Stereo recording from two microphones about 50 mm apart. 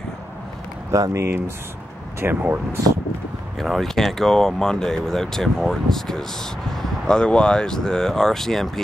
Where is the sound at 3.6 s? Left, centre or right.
Centre.